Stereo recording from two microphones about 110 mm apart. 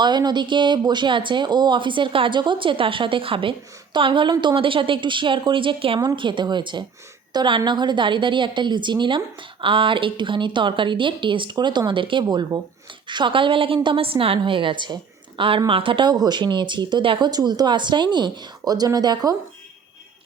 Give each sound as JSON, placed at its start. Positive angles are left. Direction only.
{"t": 0.0, "sound": "a woman's voice", "side_deg": -40}